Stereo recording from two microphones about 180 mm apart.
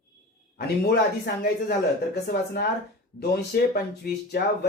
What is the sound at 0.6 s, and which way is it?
Speech, 65° left (ahead or behind).